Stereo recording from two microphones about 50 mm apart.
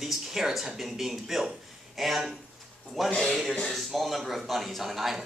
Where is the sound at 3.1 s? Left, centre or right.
Centre.